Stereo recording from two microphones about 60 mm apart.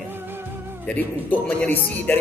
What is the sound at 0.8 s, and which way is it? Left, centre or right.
Speech, left.